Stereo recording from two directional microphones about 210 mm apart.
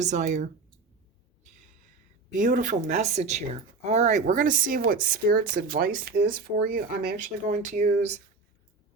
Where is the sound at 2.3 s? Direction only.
35° right (ahead or behind).